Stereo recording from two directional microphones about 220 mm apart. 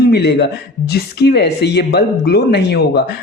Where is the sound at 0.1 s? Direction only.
50° left (ahead or behind).